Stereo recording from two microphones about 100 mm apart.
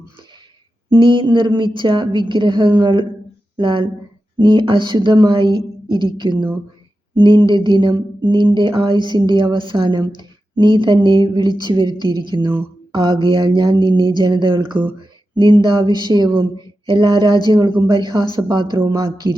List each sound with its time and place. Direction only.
0.9 s speech: 55° right (ahead or behind)
16.6 s mantra: 50° right (ahead or behind)
17.7 s speech: 55° right (ahead or behind)